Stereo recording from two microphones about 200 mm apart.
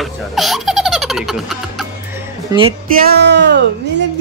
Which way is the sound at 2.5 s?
25° right (ahead or behind).